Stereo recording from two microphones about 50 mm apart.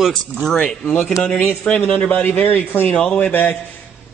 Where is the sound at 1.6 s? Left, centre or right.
Left.